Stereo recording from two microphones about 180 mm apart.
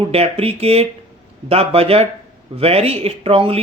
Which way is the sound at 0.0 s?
35° right (ahead or behind).